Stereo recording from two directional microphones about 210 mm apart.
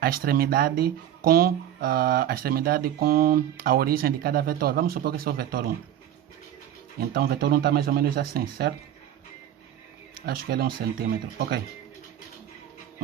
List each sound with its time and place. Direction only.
0.0 s speech: 45° right (ahead or behind)
7.1 s speech: 45° right (ahead or behind)
10.2 s speech: 45° right (ahead or behind)